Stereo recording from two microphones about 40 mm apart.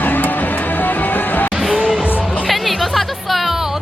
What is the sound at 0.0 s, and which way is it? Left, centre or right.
Music, left.